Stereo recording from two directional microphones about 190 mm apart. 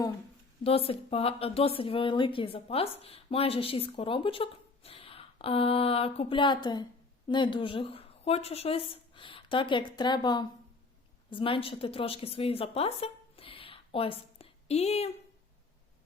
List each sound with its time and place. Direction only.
0.6 s a woman's voice: 30° left (ahead or behind)